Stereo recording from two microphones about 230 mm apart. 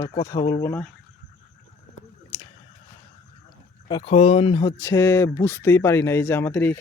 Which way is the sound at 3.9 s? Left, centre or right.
Left.